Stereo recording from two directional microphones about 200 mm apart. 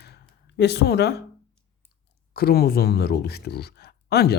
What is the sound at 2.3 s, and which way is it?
Speech, 50° left (ahead or behind).